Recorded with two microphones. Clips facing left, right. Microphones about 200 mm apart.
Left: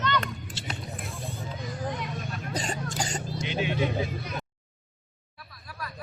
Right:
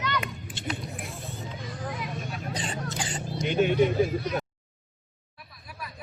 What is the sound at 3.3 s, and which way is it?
Vehicle, 50° right (ahead or behind).